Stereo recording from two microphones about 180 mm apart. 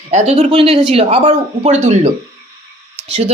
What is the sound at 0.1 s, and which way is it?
Speech, 45° right (ahead or behind).